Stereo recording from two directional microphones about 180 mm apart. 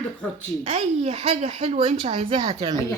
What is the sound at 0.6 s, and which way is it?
A woman's voice, 35° right (ahead or behind).